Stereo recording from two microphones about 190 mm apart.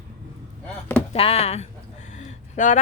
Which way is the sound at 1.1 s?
30° left (ahead or behind).